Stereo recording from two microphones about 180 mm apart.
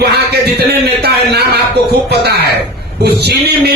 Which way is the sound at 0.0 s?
65° right (ahead or behind).